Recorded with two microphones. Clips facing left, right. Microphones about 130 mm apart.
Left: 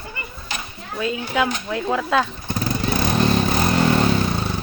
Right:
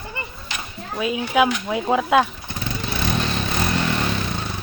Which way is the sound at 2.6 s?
40° left (ahead or behind).